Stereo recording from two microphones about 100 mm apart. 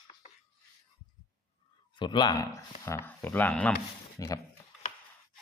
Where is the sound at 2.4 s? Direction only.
30° left (ahead or behind).